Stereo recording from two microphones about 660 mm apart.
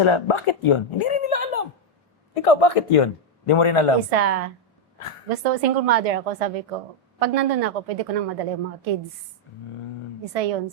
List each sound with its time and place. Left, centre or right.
0.0 s speech: left
1.3 s a sound: left
2.3 s a man's voice: left
4.1 s a woman's voice: right
10.2 s a woman's voice: right